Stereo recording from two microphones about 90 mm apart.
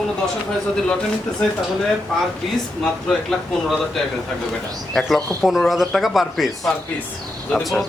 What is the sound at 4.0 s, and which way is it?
Speech, 5° left (ahead or behind).